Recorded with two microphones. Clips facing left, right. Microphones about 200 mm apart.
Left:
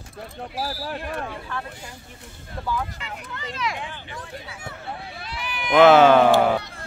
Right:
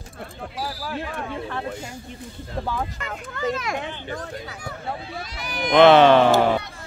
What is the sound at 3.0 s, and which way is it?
Speech, 45° right (ahead or behind).